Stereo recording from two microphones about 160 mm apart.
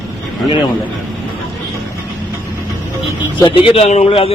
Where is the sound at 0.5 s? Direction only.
30° left (ahead or behind).